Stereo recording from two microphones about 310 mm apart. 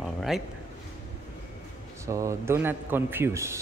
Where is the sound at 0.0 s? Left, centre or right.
Centre.